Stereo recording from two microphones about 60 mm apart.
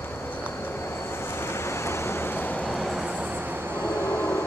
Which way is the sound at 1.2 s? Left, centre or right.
Left.